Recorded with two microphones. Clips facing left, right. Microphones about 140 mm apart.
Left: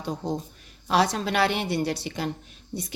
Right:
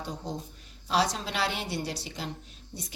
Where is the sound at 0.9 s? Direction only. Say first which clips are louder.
Left 5 dB; 60° left (ahead or behind).